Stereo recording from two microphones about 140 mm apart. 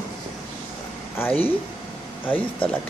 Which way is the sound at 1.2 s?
15° left (ahead or behind).